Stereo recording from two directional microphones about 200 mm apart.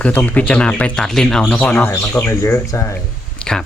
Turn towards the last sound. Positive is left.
turn(degrees=5)  # may be behind; listen again after turning